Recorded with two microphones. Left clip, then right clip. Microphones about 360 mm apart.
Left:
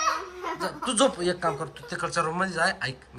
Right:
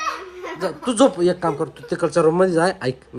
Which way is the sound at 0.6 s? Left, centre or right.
Centre.